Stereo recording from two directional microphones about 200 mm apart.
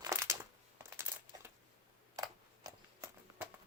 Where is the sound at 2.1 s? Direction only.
15° right (ahead or behind).